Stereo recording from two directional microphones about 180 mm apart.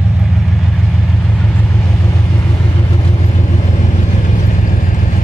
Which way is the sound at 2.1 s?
20° left (ahead or behind).